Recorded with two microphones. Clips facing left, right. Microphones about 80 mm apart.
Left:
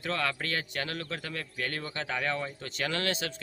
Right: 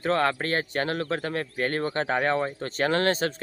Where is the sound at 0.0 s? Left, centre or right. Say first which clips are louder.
Right 8 dB; right.